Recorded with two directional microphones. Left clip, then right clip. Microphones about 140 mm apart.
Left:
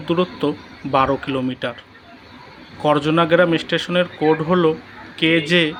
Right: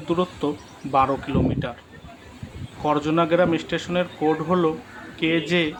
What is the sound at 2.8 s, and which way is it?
Speech, 25° left (ahead or behind).